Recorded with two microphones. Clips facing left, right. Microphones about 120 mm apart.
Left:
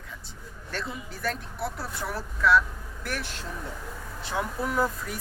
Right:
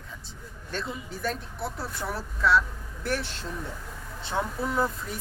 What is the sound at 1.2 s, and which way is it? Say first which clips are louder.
A man's voice: left 1 dB; 25° right (ahead or behind).